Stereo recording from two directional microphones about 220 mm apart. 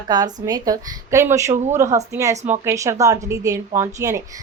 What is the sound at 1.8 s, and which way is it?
Speech, 15° right (ahead or behind).